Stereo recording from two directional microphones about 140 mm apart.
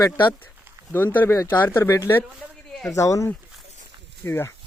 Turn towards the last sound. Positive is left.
turn(degrees=15)  # may be behind; listen again after turning